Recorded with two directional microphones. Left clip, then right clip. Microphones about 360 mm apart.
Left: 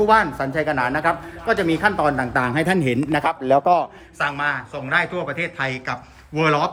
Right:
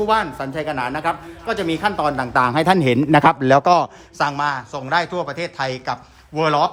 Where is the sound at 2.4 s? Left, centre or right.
Centre.